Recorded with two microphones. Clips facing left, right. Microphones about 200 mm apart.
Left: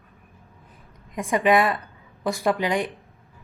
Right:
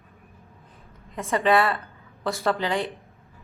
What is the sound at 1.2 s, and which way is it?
Speech, 15° left (ahead or behind).